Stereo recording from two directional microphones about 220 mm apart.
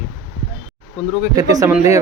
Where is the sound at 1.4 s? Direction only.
15° right (ahead or behind).